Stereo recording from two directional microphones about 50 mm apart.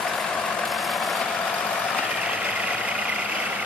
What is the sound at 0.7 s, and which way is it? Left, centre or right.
Vehicle, centre.